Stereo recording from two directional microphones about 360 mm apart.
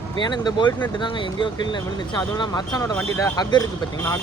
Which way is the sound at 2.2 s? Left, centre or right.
Centre.